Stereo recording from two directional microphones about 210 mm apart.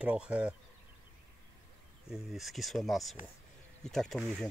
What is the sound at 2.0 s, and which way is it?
Speech, centre (ahead or behind).